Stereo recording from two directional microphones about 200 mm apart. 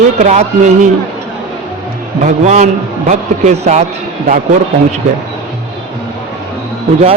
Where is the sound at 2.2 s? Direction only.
35° right (ahead or behind).